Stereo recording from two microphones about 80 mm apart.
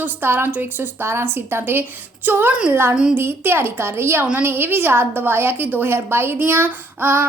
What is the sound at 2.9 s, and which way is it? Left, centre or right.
Speech, centre.